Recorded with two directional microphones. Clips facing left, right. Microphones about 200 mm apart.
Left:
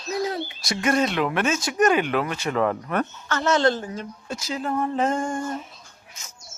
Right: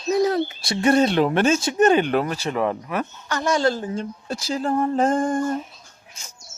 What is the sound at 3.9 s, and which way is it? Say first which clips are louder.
Speech: right 5 dB; 30° right (ahead or behind).